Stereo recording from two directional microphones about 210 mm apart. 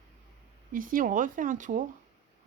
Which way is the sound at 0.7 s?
40° right (ahead or behind).